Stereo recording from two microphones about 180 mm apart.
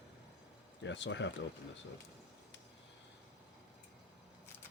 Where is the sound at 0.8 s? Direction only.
90° left.